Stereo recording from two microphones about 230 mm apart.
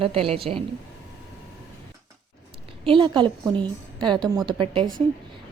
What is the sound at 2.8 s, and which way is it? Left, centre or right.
A woman's voice, right.